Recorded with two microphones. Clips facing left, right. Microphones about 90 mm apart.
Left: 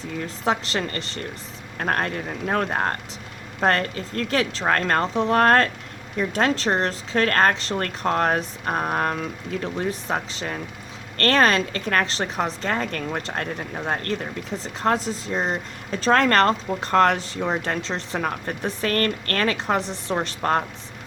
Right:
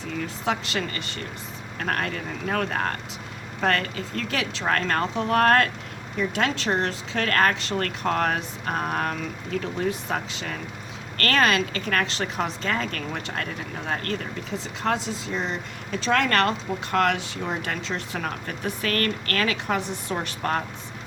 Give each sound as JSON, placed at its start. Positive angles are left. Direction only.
{"t": 0.4, "sound": "speech", "side_deg": 35}
{"t": 11.3, "sound": "speech", "side_deg": 35}